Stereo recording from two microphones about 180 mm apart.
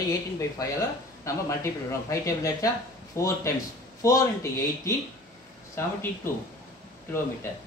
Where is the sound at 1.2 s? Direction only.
15° left (ahead or behind).